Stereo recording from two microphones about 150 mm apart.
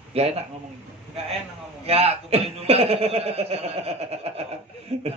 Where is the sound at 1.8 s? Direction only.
40° right (ahead or behind).